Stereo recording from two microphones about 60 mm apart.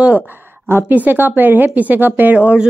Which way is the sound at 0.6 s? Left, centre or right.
Right.